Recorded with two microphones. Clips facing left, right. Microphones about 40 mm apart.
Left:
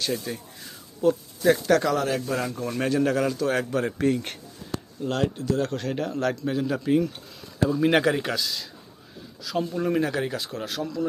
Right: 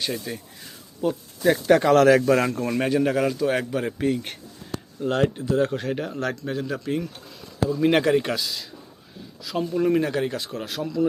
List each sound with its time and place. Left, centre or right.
0.0 s speech: centre
2.0 s a man's voice: right
2.6 s a man's voice: right
5.8 s speech: centre